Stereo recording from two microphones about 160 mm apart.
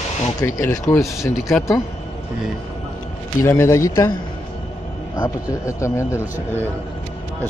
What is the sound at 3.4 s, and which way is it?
Speech, 15° left (ahead or behind).